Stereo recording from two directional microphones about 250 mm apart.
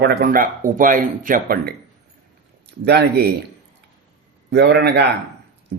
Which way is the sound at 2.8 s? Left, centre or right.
Right.